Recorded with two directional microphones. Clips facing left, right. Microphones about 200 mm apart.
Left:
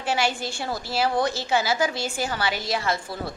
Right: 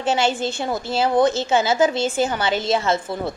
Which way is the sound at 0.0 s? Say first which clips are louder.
Right 5 dB; 25° right (ahead or behind).